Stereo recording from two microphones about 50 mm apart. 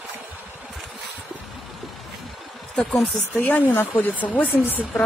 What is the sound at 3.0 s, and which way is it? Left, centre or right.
Speech, left.